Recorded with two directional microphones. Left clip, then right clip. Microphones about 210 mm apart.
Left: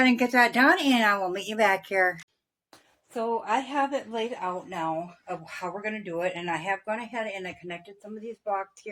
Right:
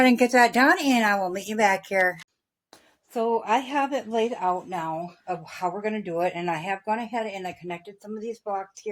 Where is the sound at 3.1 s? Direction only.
50° right (ahead or behind).